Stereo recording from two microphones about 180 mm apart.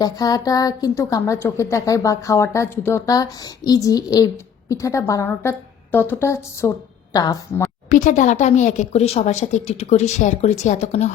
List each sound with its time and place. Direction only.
0.0 s a woman's voice: 20° left (ahead or behind)
7.9 s speech: 45° left (ahead or behind)